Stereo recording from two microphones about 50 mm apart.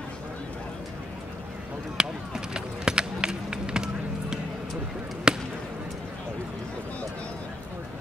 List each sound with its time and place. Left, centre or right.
2.0 s run: centre
5.3 s basketball bounce: centre